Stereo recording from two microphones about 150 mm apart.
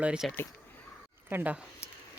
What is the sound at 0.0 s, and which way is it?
Speech, 5° right (ahead or behind).